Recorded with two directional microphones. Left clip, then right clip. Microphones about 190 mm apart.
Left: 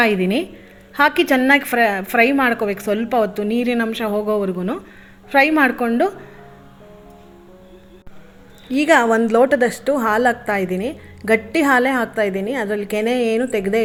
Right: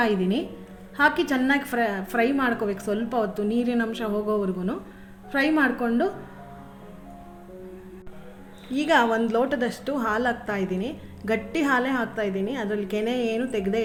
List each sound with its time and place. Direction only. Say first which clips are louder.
0.0 s a woman's voice: left 7 dB; 40° left (ahead or behind)
8.7 s a woman's voice: left 7 dB; 45° left (ahead or behind)